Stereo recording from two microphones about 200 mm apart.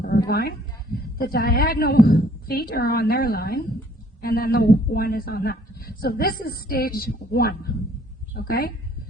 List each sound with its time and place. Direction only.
0.3 s a woman's voice: 50° left (ahead or behind)